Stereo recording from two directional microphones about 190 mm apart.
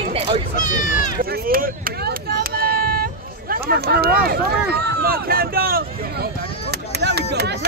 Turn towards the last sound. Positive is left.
turn(degrees=-60)  # may be behind; listen again after turning